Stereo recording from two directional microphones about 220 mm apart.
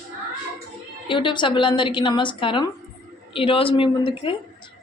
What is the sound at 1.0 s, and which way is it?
A woman's voice, 20° left (ahead or behind).